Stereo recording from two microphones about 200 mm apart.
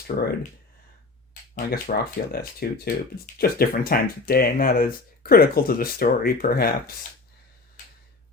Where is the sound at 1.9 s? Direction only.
45° left (ahead or behind).